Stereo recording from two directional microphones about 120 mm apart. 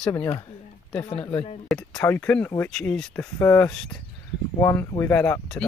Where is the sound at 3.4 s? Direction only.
20° left (ahead or behind).